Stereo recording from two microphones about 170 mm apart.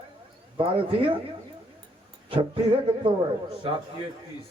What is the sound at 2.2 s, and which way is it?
Speech, 30° right (ahead or behind).